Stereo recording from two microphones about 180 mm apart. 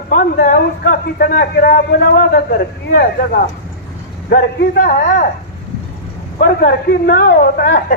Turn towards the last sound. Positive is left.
turn(degrees=55)  # may be behind; listen again after turning